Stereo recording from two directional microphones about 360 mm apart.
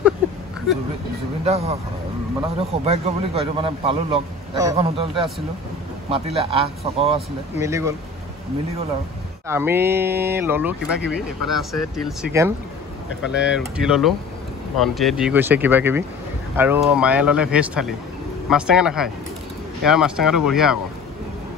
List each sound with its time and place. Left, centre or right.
1.4 s a man's voice: centre
9.5 s a man's voice: centre